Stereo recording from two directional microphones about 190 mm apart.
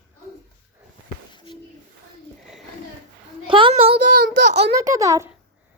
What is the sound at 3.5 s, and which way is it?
Child singing, 25° right (ahead or behind).